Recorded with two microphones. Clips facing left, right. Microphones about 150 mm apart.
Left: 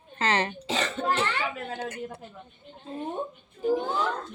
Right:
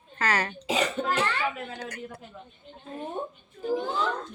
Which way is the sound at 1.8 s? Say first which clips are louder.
Left 3 dB; 25° left (ahead or behind).